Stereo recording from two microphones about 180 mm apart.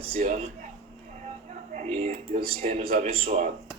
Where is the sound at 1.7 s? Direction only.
40° right (ahead or behind).